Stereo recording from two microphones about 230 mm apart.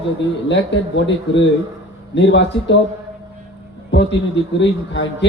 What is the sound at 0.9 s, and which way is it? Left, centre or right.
A man's voice, left.